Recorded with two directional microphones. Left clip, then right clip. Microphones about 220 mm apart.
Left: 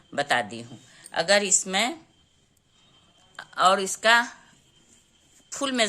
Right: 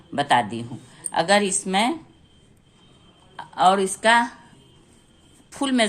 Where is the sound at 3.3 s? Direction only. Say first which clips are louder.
Right 3 dB; 30° left (ahead or behind).